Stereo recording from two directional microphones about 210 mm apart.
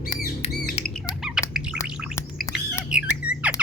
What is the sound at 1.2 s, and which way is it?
Squawk, 5° right (ahead or behind).